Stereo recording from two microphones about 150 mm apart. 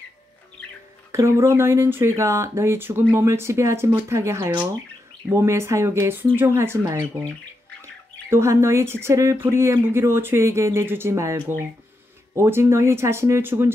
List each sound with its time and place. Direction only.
1.1 s speech: 20° right (ahead or behind)